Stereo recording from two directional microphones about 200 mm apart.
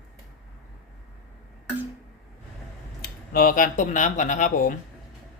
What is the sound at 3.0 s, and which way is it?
Speech, 45° left (ahead or behind).